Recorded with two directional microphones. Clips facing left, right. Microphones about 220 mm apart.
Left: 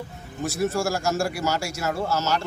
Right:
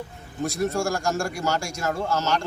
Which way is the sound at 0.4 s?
5° left (ahead or behind).